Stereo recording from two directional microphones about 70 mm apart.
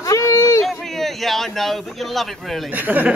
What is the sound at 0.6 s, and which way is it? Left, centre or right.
Speech, centre.